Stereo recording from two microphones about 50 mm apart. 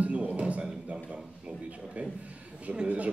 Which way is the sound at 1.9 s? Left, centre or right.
Right.